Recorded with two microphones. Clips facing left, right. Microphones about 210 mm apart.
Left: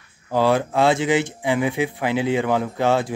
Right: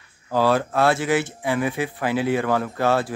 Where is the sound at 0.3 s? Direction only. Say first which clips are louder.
Left 1 dB; 15° left (ahead or behind).